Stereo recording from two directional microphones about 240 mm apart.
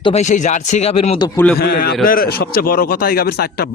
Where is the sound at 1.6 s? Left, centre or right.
Left.